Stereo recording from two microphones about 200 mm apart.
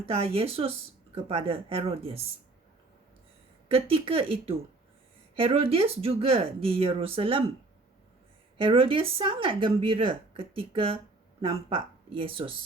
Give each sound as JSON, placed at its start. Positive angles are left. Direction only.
{"t": 0.1, "sound": "speech", "side_deg": -30}
{"t": 3.7, "sound": "speech", "side_deg": -30}
{"t": 8.6, "sound": "speech", "side_deg": -25}